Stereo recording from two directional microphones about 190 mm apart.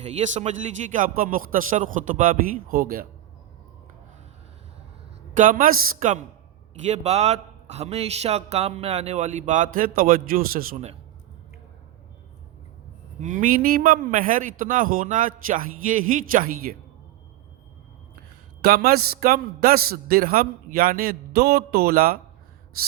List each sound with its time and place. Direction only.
0.0 s a man's voice: 35° right (ahead or behind)
5.3 s speech: 45° right (ahead or behind)
6.8 s a man's voice: 35° right (ahead or behind)
13.1 s a man's voice: 45° right (ahead or behind)
18.6 s a man's voice: 55° right (ahead or behind)